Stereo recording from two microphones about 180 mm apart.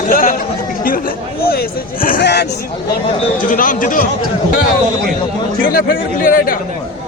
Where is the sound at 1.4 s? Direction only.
55° left (ahead or behind).